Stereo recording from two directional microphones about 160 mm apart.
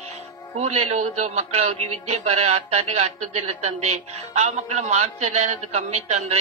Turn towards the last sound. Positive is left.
turn(degrees=-45)  # may be behind; listen again after turning